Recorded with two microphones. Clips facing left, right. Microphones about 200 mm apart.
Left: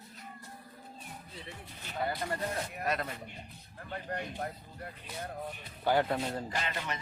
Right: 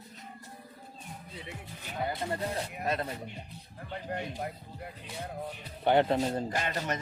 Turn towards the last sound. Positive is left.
turn(degrees=-45)  # may be behind; listen again after turning